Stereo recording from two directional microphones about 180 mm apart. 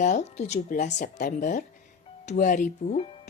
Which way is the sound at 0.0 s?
40° left (ahead or behind).